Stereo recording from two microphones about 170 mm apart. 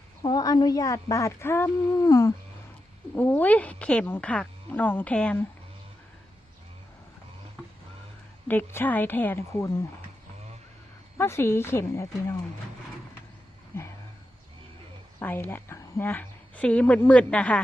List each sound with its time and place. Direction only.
0.2 s a woman's voice: 20° left (ahead or behind); by 5.5 s 5° left (ahead or behind)
8.4 s speech: 10° left (ahead or behind)
11.2 s speech: 15° left (ahead or behind)
13.7 s speech: 15° left (ahead or behind)
15.2 s a woman's voice: 10° left (ahead or behind)